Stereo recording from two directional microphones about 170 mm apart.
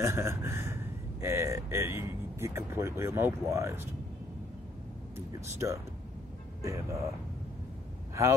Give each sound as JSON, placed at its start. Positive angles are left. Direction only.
{"t": 0.0, "sound": "speech", "side_deg": -15}
{"t": 5.3, "sound": "speech", "side_deg": -15}